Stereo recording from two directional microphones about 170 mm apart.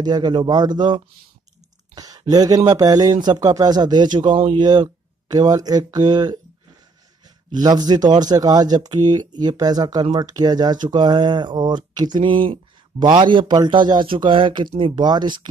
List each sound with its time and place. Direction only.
0.0 s speech: 25° right (ahead or behind)